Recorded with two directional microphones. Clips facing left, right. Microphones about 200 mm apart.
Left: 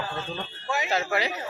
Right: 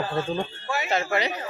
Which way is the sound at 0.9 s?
Centre (ahead or behind).